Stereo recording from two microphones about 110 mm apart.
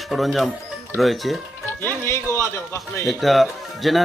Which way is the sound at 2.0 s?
25° left (ahead or behind).